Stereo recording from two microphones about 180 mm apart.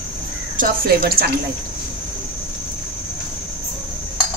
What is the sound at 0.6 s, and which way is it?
Speech, 60° right (ahead or behind).